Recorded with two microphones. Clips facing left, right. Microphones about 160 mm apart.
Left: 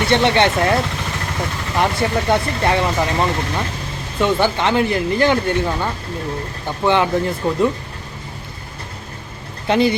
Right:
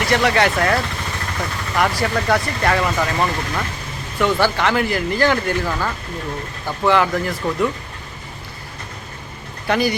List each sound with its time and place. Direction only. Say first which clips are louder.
0.0 s speech: left 2 dB; 25° left (ahead or behind)
9.6 s speech: left 3 dB; 25° left (ahead or behind)